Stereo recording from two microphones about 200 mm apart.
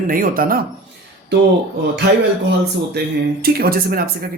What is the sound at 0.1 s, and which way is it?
Speech, 45° right (ahead or behind).